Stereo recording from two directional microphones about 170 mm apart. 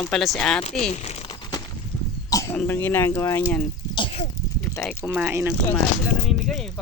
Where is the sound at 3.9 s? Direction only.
30° left (ahead or behind).